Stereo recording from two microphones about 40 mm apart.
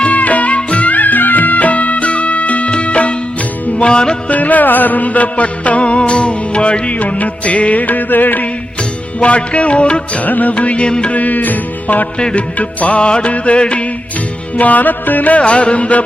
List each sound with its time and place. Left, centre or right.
0.0 s music: left
4.3 s music: left
9.2 s music: left
10.2 s music: left
10.5 s music: left
11.1 s music: left
12.2 s music: left
14.6 s music: left